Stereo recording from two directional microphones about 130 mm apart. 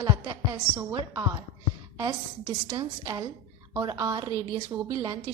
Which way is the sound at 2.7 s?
25° right (ahead or behind).